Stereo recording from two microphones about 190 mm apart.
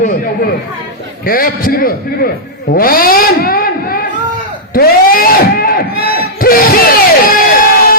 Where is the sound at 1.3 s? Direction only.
50° left (ahead or behind).